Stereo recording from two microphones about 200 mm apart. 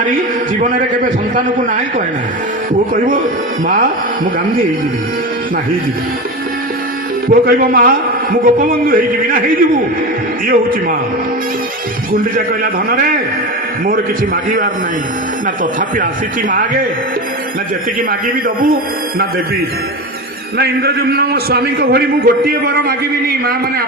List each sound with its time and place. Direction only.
0.6 s a man's voice: 40° right (ahead or behind)
7.3 s a man's voice: 45° right (ahead or behind)
16.5 s a man's voice: 40° right (ahead or behind)
18.4 s a man's voice: 45° right (ahead or behind)
20.6 s a man's voice: 50° right (ahead or behind)